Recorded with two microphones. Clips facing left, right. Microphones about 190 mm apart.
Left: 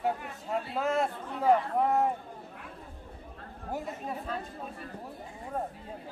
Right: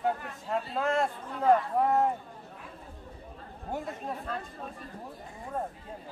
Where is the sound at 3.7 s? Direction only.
5° left (ahead or behind).